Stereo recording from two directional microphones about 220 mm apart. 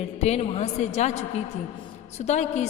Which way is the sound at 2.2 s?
30° left (ahead or behind).